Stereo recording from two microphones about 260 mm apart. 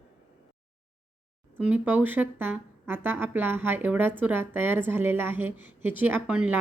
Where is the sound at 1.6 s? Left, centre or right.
Centre.